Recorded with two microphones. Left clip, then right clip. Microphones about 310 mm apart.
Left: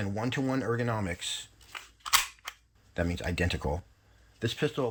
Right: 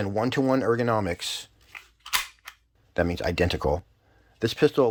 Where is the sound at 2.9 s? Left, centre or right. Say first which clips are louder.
Right 7 dB; centre.